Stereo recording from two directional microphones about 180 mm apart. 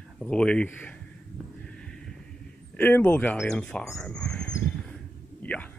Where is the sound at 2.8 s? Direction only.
10° left (ahead or behind).